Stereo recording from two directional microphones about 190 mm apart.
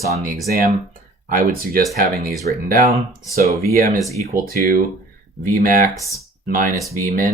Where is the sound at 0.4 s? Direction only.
55° right (ahead or behind).